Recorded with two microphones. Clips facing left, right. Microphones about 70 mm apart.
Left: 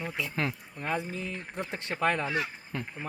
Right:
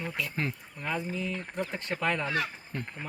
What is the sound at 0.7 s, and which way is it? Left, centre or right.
Speech, left.